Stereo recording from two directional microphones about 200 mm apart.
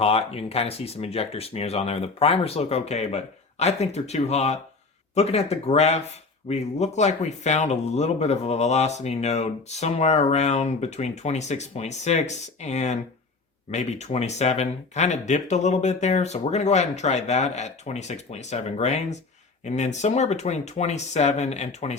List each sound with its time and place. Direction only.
0.0 s speech: 30° left (ahead or behind)